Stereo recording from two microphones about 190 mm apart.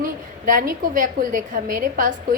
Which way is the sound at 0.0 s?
45° right (ahead or behind).